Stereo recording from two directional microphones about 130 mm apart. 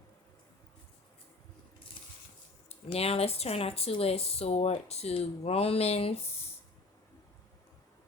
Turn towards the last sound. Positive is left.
turn(degrees=50)  # may be behind; listen again after turning